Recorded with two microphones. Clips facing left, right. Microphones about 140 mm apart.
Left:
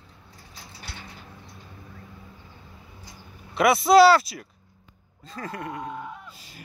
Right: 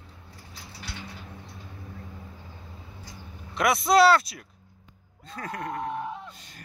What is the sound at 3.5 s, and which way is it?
Speech, centre (ahead or behind).